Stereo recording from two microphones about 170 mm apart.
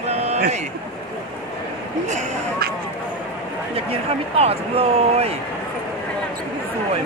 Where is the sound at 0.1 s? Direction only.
40° right (ahead or behind).